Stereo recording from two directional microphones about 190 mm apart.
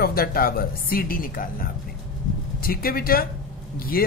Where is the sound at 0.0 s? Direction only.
50° left (ahead or behind).